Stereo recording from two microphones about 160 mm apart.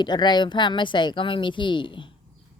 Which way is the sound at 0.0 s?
25° left (ahead or behind).